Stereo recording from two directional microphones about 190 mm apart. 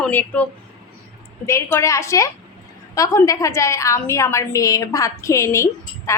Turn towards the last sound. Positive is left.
turn(degrees=15)  # may be behind; listen again after turning